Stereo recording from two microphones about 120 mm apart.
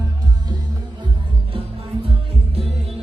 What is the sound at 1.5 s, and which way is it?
Music, 50° right (ahead or behind).